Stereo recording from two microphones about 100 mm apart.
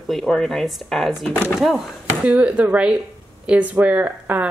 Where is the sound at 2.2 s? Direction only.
15° right (ahead or behind).